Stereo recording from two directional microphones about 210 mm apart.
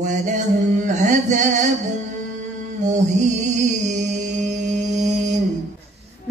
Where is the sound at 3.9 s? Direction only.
35° right (ahead or behind).